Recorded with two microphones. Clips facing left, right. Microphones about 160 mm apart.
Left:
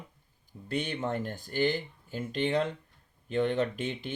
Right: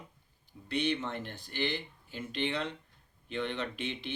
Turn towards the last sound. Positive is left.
turn(degrees=45)  # may be behind; listen again after turning